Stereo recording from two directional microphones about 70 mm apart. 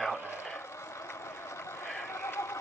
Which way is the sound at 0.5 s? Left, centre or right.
Left.